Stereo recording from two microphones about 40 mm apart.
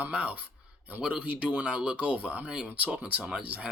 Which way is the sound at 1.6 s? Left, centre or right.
Right.